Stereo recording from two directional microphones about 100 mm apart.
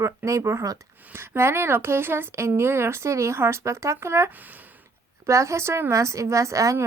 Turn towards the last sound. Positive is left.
turn(degrees=-30)  # may be behind; listen again after turning